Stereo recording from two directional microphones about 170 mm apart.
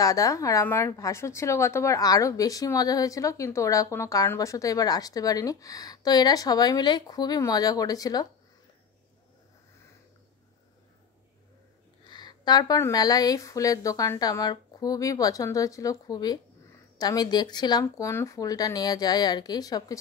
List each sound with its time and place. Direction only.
0.0 s speech: 20° left (ahead or behind)
12.1 s speech: 25° left (ahead or behind)